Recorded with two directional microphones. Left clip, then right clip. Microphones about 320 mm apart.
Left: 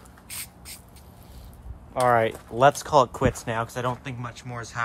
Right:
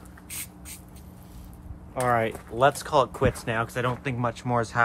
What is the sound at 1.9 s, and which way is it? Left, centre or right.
Speech, left.